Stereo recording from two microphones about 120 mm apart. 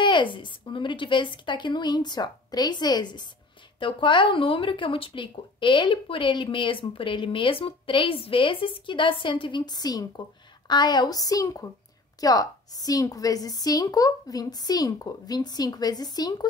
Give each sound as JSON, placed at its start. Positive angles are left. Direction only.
{"t": 0.0, "sound": "a woman's voice", "side_deg": 40}